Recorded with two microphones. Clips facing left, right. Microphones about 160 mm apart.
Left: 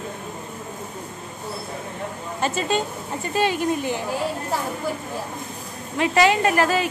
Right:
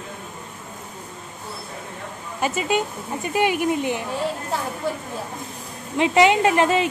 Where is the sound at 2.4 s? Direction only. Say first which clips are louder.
Right 1 dB; 10° right (ahead or behind).